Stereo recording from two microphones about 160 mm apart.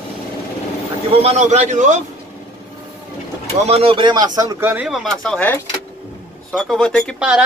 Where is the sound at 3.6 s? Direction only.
35° right (ahead or behind); by 4.8 s 15° right (ahead or behind).